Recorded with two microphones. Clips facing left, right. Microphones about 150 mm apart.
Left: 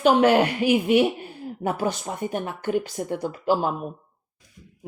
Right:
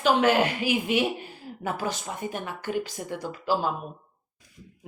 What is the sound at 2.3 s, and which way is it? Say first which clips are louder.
Speech: left 6 dB; 55° left (ahead or behind).